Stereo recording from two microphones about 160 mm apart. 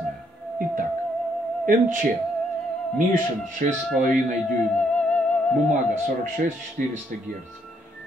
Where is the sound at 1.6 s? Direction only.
55° right (ahead or behind).